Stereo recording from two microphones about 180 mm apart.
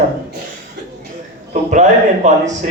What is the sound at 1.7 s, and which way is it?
Speech, 40° right (ahead or behind).